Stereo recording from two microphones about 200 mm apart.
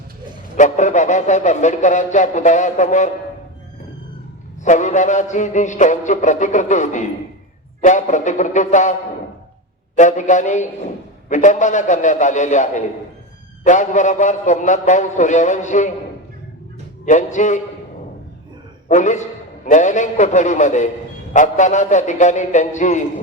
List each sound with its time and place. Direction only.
0.5 s speech: 40° left (ahead or behind)
4.6 s speech: 35° left (ahead or behind)
10.0 s speech: 35° left (ahead or behind)
17.1 s speech: 40° left (ahead or behind)
18.9 s speech: 35° left (ahead or behind)